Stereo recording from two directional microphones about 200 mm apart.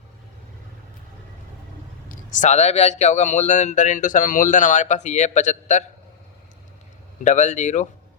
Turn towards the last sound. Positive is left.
turn(degrees=35)  # may be behind; listen again after turning